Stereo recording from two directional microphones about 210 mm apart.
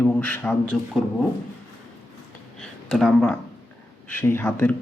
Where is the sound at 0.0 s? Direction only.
10° left (ahead or behind).